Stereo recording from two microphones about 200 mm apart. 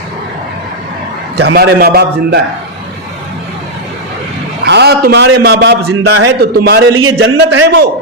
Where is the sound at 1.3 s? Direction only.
55° right (ahead or behind).